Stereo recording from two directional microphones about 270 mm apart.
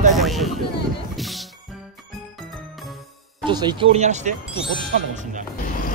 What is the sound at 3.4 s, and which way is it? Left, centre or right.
Speech, centre.